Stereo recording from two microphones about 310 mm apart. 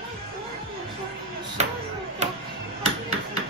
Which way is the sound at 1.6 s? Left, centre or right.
Right.